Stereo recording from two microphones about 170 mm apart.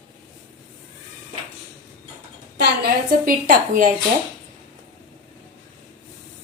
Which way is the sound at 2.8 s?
55° right (ahead or behind).